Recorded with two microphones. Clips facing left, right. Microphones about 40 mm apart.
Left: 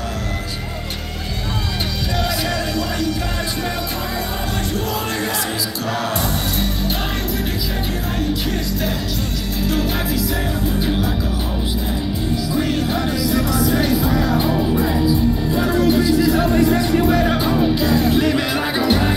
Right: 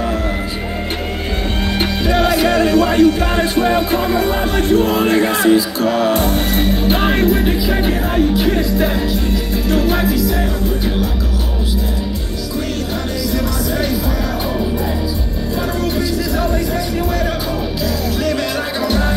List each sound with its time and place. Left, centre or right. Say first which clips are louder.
2.1 s music: right 8 dB; right
9.7 s music: right 6 dB; centre
13.3 s music: left 2 dB; centre
15.5 s music: left 1 dB; centre
17.8 s music: left 2 dB; left